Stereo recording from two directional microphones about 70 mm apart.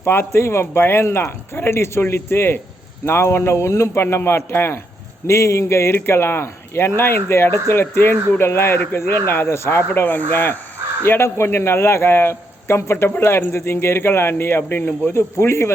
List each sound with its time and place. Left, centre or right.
0.0 s a man's voice: left